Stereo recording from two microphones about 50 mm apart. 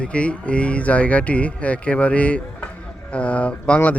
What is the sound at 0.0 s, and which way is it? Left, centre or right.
Speech, left.